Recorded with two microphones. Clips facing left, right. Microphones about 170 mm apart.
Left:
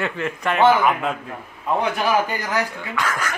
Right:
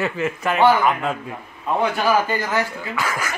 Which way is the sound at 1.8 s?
15° left (ahead or behind).